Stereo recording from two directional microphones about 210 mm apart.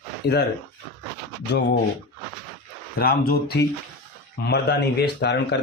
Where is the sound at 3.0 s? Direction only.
45° left (ahead or behind).